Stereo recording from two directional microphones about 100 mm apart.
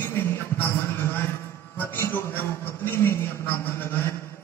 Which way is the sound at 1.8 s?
20° left (ahead or behind).